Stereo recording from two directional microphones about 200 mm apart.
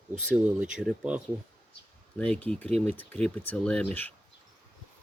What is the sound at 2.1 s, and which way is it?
Speech, 5° left (ahead or behind).